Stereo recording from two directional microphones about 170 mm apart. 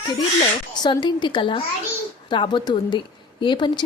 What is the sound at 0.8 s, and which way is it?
A child's voice, 25° left (ahead or behind).